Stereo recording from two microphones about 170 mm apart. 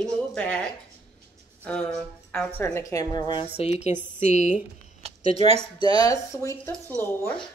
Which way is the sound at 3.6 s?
40° left (ahead or behind).